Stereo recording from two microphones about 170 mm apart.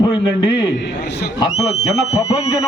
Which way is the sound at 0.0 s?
30° left (ahead or behind).